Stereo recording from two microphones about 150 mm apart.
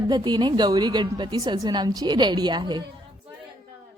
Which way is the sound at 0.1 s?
30° right (ahead or behind).